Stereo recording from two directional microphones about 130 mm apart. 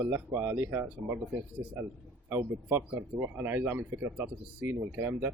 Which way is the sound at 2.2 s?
20° right (ahead or behind).